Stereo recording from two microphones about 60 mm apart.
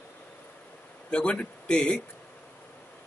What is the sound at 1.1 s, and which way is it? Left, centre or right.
Speech, centre.